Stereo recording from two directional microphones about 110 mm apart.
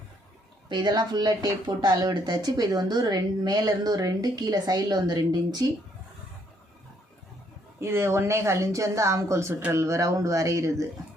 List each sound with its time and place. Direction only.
0.7 s speech: 40° right (ahead or behind)
7.8 s speech: 25° right (ahead or behind)